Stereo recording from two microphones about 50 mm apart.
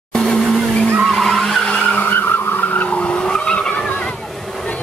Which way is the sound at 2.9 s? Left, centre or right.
Left.